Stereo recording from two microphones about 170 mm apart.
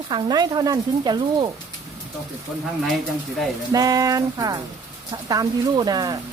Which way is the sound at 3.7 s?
20° right (ahead or behind).